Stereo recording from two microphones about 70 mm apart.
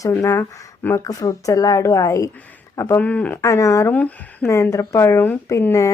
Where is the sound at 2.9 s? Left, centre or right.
Left.